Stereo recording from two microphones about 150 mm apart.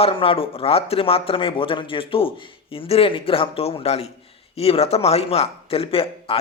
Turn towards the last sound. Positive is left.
turn(degrees=40)  # may be behind; listen again after turning